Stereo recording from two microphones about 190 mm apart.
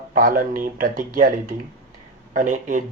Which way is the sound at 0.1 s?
45° right (ahead or behind).